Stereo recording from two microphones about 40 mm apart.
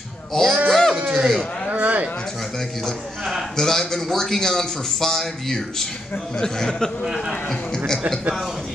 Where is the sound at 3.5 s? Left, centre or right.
Centre.